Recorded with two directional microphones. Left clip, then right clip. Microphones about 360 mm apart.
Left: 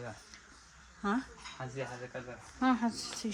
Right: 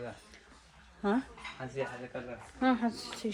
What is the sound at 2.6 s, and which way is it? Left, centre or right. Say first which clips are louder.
Speech: right 1 dB; centre.